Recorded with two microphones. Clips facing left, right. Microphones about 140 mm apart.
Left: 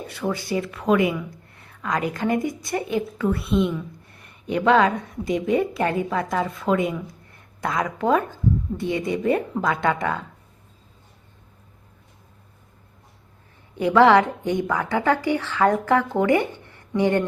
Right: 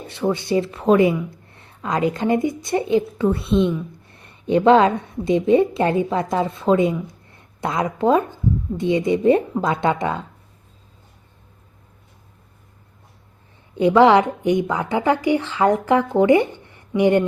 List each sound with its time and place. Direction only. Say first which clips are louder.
0.1 s speech: right 6 dB; 25° right (ahead or behind)
13.7 s speech: right 2 dB; 20° right (ahead or behind)